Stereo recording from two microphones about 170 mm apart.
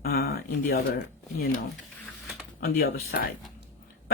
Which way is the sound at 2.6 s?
60° left (ahead or behind).